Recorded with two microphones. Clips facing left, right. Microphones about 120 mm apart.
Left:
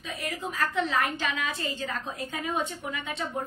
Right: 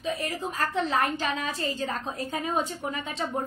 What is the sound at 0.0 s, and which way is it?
A woman's voice, 40° right (ahead or behind).